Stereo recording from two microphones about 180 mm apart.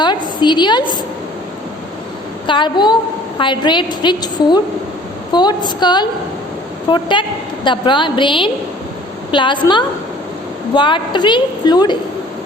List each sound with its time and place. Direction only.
0.0 s a woman's voice: 25° left (ahead or behind)
2.5 s a woman's voice: 25° left (ahead or behind)